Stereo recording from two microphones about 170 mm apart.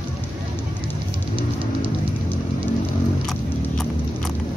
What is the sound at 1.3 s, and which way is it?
Music, 30° right (ahead or behind).